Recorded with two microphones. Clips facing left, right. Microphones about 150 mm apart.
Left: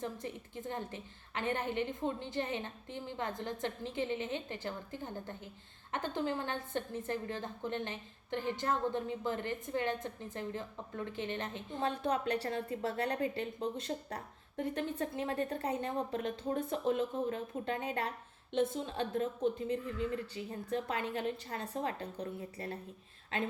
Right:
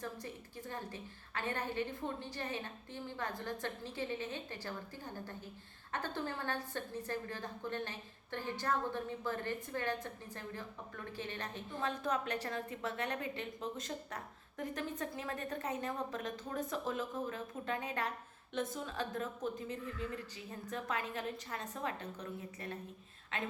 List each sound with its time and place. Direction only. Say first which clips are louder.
0.0 s a woman's voice: left 4 dB; 20° left (ahead or behind)